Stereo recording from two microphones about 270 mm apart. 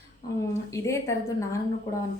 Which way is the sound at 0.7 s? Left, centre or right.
Centre.